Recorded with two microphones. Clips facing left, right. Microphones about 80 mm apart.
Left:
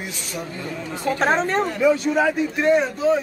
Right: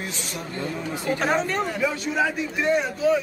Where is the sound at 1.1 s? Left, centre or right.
Left.